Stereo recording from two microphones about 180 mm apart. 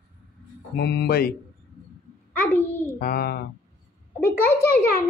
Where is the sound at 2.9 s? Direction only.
60° left (ahead or behind).